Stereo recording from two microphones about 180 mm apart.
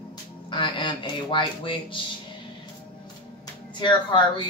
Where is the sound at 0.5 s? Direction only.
25° left (ahead or behind).